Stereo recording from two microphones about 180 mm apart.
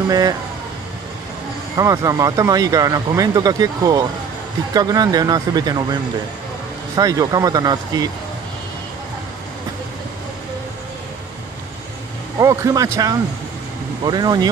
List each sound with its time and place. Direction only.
0.1 s speech: 20° right (ahead or behind)
1.8 s speech: 20° right (ahead or behind)
7.0 s speech: 20° right (ahead or behind)
12.4 s speech: 20° right (ahead or behind)